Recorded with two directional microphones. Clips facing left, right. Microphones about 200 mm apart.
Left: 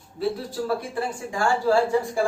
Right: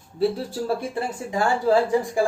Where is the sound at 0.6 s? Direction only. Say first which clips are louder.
Even; 20° right (ahead or behind).